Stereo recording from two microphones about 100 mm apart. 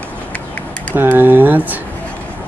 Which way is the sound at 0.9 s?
20° right (ahead or behind).